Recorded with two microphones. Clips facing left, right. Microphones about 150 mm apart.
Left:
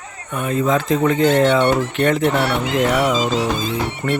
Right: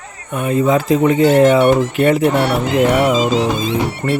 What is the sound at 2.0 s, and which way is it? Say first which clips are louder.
Speech: right 4 dB; 5° right (ahead or behind).